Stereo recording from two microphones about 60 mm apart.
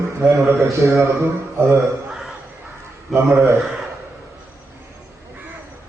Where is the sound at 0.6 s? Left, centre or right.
Right.